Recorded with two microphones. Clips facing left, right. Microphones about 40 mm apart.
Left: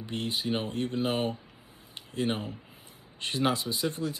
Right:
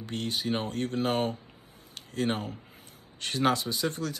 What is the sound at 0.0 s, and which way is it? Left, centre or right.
Speech, centre.